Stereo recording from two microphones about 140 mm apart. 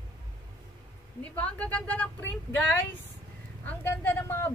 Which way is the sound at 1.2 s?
10° left (ahead or behind).